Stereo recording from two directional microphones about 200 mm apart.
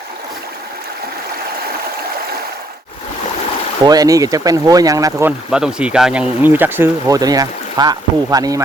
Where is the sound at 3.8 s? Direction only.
20° right (ahead or behind).